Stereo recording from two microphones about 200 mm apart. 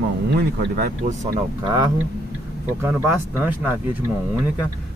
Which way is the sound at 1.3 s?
20° right (ahead or behind).